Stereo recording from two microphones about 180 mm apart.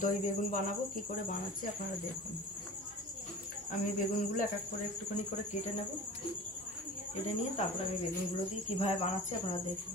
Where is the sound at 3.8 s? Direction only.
50° left (ahead or behind).